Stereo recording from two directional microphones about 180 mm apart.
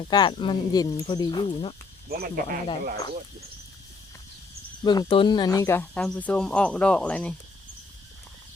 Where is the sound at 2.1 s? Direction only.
60° right (ahead or behind).